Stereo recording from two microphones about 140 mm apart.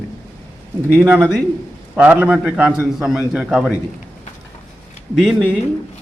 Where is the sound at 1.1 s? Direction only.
10° right (ahead or behind).